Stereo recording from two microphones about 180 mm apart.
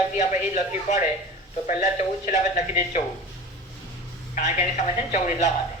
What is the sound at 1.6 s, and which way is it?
Speech, 45° left (ahead or behind).